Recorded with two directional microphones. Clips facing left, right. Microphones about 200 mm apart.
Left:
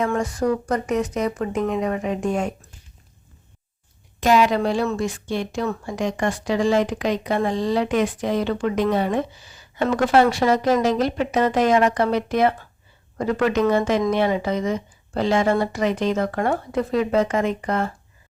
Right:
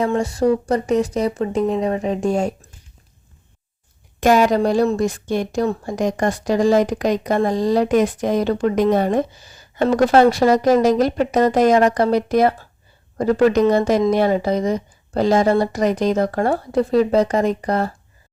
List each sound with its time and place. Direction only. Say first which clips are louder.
0.1 s speech: right 4 dB; 30° right (ahead or behind)
4.2 s speech: right 3 dB; 45° right (ahead or behind)